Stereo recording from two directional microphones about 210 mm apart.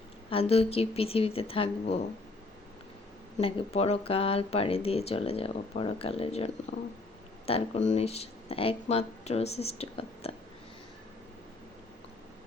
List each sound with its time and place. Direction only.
0.3 s speech: 30° left (ahead or behind)
3.3 s speech: 30° left (ahead or behind)